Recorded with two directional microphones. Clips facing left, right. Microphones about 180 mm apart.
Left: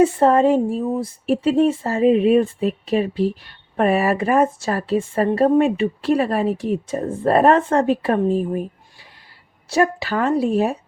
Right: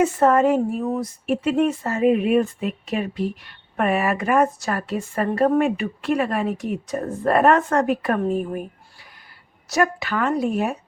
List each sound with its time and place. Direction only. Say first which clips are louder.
0.0 s speech: left 3 dB; 30° left (ahead or behind)
9.6 s speech: left 3 dB; 30° left (ahead or behind)